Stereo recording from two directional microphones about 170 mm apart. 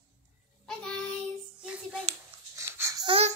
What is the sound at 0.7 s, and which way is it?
Child singing, 5° left (ahead or behind).